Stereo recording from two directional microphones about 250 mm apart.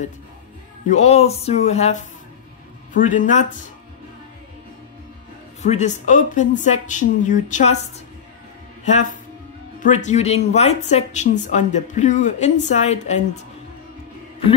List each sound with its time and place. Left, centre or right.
0.8 s speech: left
5.6 s speech: left
8.8 s speech: left